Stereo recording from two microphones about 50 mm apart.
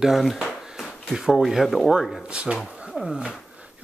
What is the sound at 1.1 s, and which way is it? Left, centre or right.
Speech, centre.